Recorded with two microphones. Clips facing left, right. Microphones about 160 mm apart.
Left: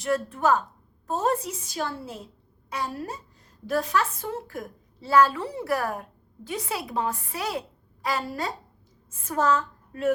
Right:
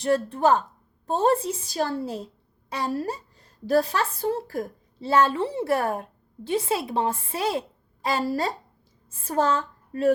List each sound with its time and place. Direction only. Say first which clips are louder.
0.0 s a woman's voice: right 3 dB; 30° right (ahead or behind)